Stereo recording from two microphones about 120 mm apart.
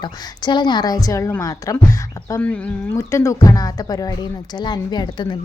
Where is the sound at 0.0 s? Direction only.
40° left (ahead or behind).